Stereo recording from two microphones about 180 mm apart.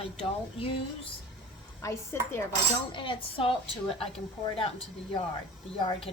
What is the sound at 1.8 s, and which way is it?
Speech, 15° left (ahead or behind).